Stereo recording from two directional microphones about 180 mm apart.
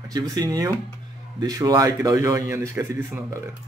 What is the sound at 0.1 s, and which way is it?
Speech, 20° right (ahead or behind).